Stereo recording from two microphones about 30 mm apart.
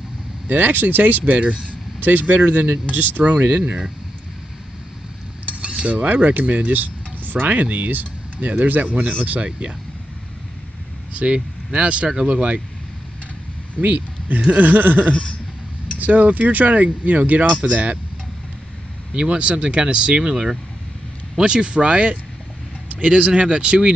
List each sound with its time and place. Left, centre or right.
0.5 s speech: right
3.3 s speech: right
5.6 s cutlery: right
5.9 s speech: right
8.9 s speech: right
9.4 s speech: right
11.1 s speech: right
13.7 s speech: right
14.6 s a sound: right
16.0 s speech: right
17.5 s speech: right
19.1 s speech: right
21.5 s speech: right